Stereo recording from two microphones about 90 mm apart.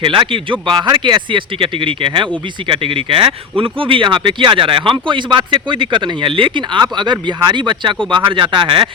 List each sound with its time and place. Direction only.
0.0 s speech: 65° right (ahead or behind)
0.9 s speech: 50° right (ahead or behind)